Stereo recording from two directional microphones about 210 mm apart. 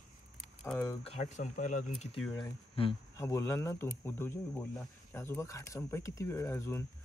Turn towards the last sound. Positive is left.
turn(degrees=10)  # may be behind; listen again after turning